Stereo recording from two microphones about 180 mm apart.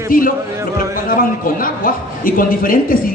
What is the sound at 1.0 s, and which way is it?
A man's voice, 50° left (ahead or behind).